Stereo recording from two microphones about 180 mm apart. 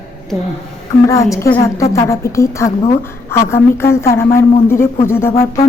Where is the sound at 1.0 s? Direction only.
15° left (ahead or behind).